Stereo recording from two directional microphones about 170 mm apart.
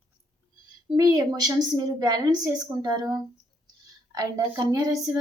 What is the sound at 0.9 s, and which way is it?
A woman's voice, 20° right (ahead or behind).